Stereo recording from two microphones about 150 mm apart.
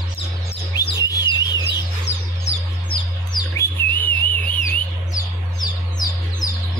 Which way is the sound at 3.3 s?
25° left (ahead or behind).